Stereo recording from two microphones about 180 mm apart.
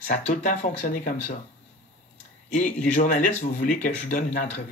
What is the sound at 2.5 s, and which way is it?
Speech, 45° left (ahead or behind).